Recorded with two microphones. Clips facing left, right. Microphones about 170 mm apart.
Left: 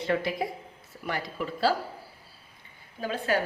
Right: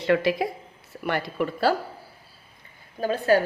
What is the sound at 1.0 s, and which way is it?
Speech, 65° right (ahead or behind).